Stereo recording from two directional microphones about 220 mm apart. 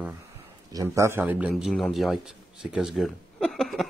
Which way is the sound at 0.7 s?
15° right (ahead or behind).